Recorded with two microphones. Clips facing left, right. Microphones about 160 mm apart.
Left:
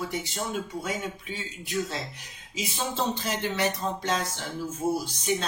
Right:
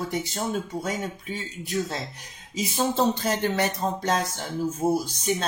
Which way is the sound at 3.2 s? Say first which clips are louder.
Right 3 dB; 50° right (ahead or behind).